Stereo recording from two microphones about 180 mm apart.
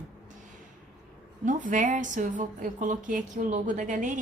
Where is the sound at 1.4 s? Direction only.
45° right (ahead or behind).